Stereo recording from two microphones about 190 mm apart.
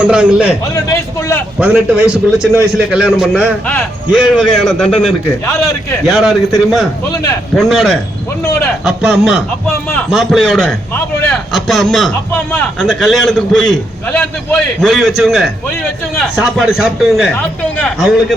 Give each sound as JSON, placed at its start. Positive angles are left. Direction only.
{"t": 0.0, "sound": "a man's voice", "side_deg": -5}
{"t": 1.5, "sound": "a man's voice", "side_deg": -5}
{"t": 6.1, "sound": "a man's voice", "side_deg": 0}
{"t": 7.5, "sound": "a man's voice", "side_deg": 0}